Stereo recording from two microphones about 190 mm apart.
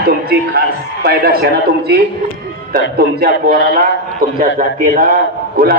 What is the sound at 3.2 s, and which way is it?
A man's voice, 50° right (ahead or behind).